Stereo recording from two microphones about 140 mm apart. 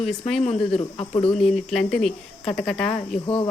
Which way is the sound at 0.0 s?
Centre (ahead or behind).